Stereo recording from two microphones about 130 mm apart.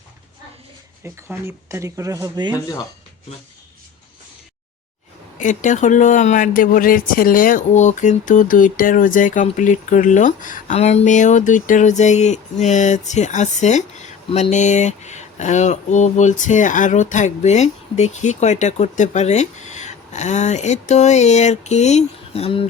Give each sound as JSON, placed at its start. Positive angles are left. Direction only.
{"t": 1.0, "sound": "speech", "side_deg": -20}
{"t": 5.4, "sound": "speech", "side_deg": 75}
{"t": 10.8, "sound": "speech", "side_deg": 55}
{"t": 14.3, "sound": "speech", "side_deg": 45}
{"t": 14.5, "sound": "speech", "side_deg": 65}